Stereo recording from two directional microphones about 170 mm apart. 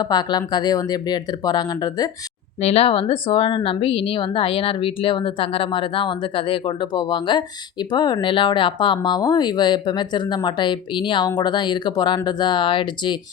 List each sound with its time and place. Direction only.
0.0 s a woman's voice: 25° left (ahead or behind)
2.6 s a woman's voice: 40° left (ahead or behind)